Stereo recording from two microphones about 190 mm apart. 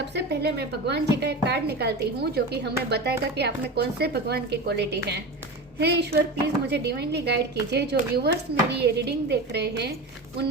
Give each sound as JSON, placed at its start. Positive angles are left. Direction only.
{"t": 0.2, "sound": "a woman's voice", "side_deg": -60}